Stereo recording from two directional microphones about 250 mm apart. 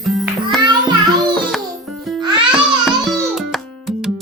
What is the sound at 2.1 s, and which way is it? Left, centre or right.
Music, centre.